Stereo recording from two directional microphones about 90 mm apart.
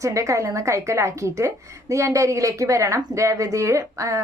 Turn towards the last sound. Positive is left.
turn(degrees=-35)  # may be behind; listen again after turning